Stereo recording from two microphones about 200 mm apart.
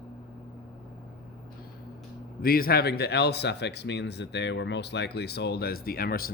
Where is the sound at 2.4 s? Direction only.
50° left (ahead or behind).